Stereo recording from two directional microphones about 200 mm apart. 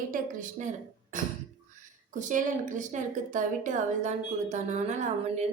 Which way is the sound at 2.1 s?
40° right (ahead or behind).